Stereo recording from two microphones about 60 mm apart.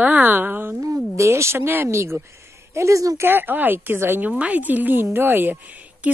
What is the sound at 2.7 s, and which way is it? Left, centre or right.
Speech, right.